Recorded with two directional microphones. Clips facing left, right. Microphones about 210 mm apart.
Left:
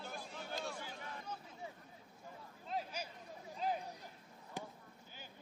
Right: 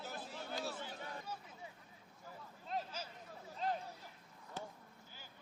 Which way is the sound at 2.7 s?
10° left (ahead or behind).